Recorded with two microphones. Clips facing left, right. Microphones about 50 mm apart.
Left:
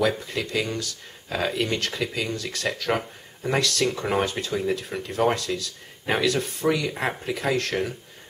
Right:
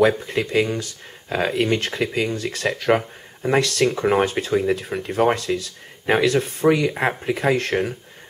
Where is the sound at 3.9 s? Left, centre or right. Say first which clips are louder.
Right 6 dB; centre.